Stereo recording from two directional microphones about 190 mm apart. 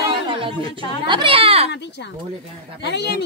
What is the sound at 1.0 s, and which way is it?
Speech, 25° right (ahead or behind).